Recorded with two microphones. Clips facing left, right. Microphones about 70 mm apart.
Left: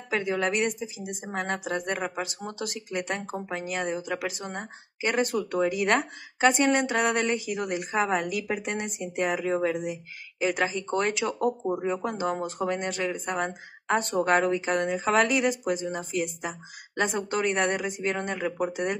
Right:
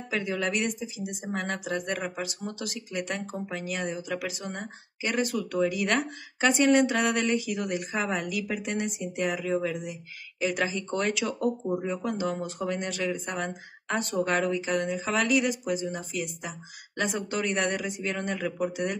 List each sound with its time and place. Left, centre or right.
0.1 s speech: left